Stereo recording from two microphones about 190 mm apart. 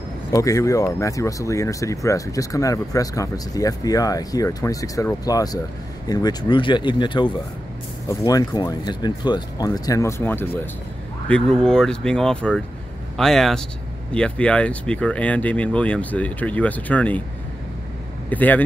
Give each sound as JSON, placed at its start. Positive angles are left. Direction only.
{"t": 0.3, "sound": "speech", "side_deg": 15}
{"t": 18.3, "sound": "speech", "side_deg": 10}